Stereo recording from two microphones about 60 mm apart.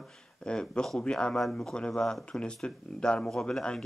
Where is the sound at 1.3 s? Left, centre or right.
Centre.